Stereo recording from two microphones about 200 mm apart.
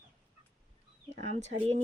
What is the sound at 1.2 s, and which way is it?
Speech, 35° right (ahead or behind).